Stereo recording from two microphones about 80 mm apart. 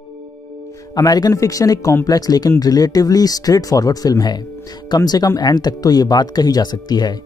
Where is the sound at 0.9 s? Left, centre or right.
Left.